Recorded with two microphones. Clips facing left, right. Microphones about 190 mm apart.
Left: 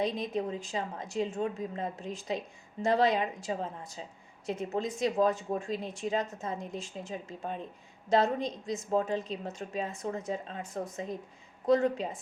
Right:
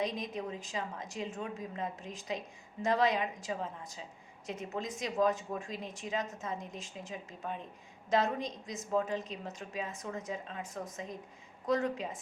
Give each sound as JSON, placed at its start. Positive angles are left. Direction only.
{"t": 0.0, "sound": "speech", "side_deg": 30}